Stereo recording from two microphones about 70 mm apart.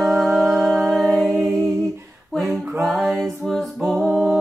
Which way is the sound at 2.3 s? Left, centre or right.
Centre.